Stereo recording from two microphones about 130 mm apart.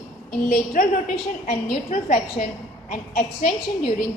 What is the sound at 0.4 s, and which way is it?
Speech, 90° left.